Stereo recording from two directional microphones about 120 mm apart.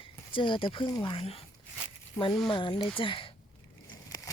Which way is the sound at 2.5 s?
45° left (ahead or behind).